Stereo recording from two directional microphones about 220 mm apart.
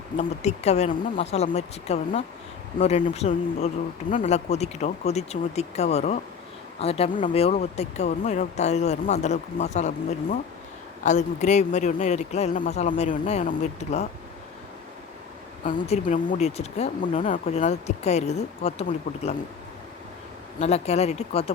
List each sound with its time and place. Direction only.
0.2 s speech: 30° left (ahead or behind)
15.6 s speech: 35° left (ahead or behind)
20.6 s speech: 30° left (ahead or behind)